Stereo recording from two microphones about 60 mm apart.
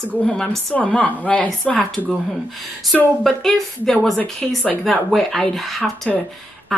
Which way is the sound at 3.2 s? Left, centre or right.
Centre.